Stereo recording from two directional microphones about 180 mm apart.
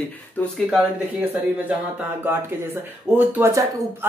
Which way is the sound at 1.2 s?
10° right (ahead or behind).